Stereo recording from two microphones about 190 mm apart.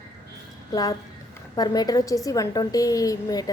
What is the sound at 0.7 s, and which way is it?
A woman's voice, 20° left (ahead or behind).